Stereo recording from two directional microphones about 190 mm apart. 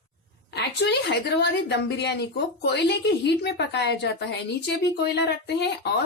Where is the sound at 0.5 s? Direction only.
65° left (ahead or behind).